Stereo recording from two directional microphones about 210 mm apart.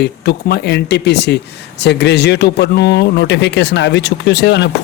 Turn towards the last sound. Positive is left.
turn(degrees=55)  # may be behind; listen again after turning